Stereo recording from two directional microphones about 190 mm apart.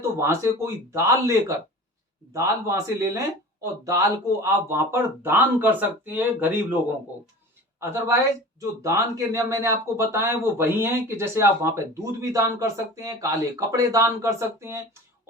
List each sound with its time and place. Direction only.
0.0 s speech: 15° right (ahead or behind)
7.8 s speech: 15° right (ahead or behind)